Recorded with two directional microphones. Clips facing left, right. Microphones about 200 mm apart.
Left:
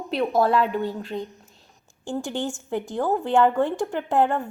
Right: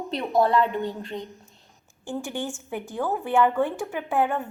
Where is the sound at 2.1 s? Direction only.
15° left (ahead or behind).